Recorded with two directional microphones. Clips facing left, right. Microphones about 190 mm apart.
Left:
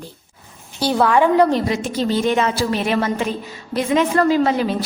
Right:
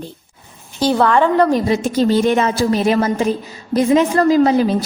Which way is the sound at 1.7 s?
40° right (ahead or behind).